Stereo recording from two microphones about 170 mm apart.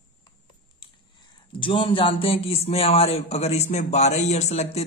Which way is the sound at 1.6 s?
30° left (ahead or behind).